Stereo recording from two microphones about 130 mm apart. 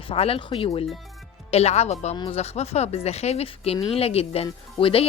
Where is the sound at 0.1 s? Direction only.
45° left (ahead or behind).